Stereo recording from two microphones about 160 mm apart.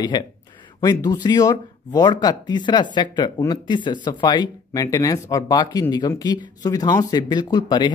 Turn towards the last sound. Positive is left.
turn(degrees=30)  # may be behind; listen again after turning